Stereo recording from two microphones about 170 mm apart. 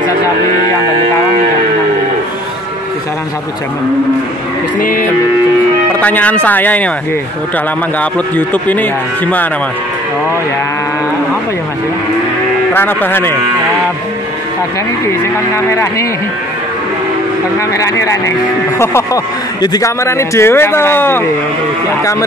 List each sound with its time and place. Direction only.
4.7 s music: 50° left (ahead or behind)
5.9 s a man's voice: 10° left (ahead or behind)
12.7 s a man's voice: 10° left (ahead or behind)
15.0 s a man's voice: 15° left (ahead or behind)
17.6 s a man's voice: 20° left (ahead or behind)